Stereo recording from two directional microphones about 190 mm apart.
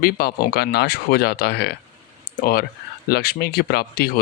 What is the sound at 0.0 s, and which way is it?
Speech, 50° left (ahead or behind).